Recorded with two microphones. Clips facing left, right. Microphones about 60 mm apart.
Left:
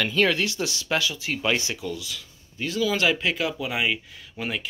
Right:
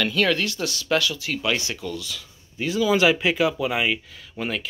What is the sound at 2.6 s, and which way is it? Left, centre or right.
Speech, centre.